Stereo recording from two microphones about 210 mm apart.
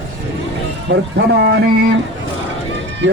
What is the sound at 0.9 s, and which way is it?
Speech, 55° right (ahead or behind).